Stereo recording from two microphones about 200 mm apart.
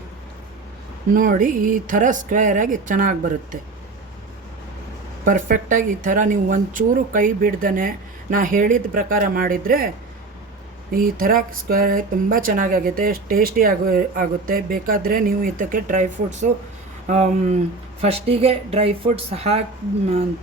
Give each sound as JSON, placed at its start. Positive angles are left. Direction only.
{"t": 1.1, "sound": "speech", "side_deg": -40}
{"t": 5.2, "sound": "speech", "side_deg": -40}
{"t": 10.9, "sound": "speech", "side_deg": -45}